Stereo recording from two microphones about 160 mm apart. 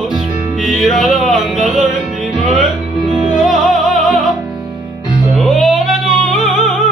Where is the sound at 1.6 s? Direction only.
55° right (ahead or behind).